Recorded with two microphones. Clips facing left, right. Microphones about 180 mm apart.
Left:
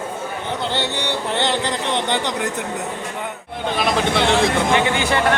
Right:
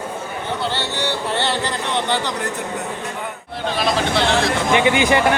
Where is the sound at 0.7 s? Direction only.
20° left (ahead or behind).